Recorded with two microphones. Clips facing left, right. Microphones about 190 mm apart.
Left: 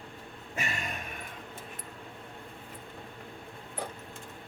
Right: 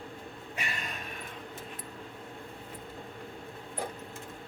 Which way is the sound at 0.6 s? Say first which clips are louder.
Left 3 dB; 45° left (ahead or behind).